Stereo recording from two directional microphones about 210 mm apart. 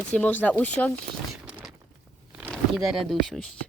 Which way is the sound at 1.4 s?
5° right (ahead or behind).